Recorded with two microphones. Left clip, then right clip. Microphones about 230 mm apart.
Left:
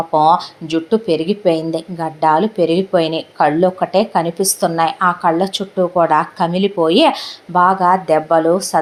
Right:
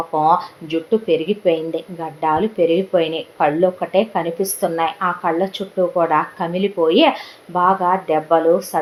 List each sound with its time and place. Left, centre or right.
0.1 s speech: left